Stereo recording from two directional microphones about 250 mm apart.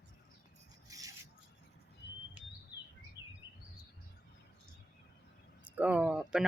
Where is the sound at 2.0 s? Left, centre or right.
Left.